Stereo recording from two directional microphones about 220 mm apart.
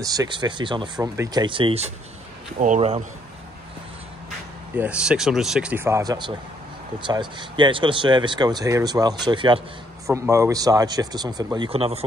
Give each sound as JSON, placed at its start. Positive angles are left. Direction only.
{"t": 0.0, "sound": "speech", "side_deg": -15}
{"t": 4.7, "sound": "speech", "side_deg": -5}